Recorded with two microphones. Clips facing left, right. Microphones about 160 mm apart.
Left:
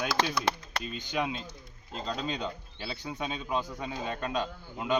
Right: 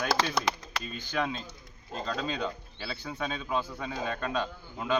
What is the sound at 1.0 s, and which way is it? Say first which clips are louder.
Speech: right 1 dB; 15° left (ahead or behind).